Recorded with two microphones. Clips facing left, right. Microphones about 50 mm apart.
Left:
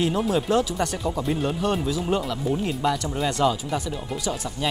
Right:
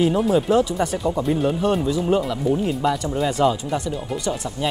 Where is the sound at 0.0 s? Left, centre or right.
Centre.